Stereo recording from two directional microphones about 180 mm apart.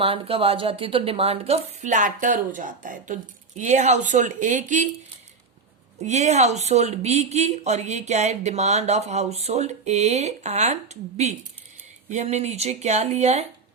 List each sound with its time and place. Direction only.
0.0 s speech: 30° right (ahead or behind)
6.0 s speech: 40° right (ahead or behind)